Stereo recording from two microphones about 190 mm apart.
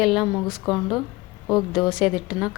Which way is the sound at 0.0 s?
Centre (ahead or behind).